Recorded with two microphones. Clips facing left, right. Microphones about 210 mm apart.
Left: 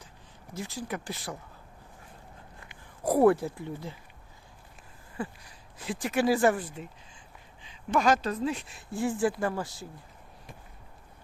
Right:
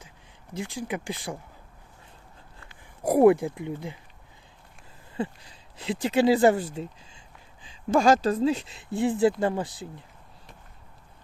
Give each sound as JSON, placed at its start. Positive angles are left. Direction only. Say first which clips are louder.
{"t": 0.6, "sound": "speech", "louder": "right 4 dB", "side_deg": -15}
{"t": 3.0, "sound": "speech", "louder": "right 4 dB", "side_deg": -10}
{"t": 5.1, "sound": "speech", "louder": "right 5 dB", "side_deg": -25}
{"t": 7.9, "sound": "speech", "louder": "right 5 dB", "side_deg": -30}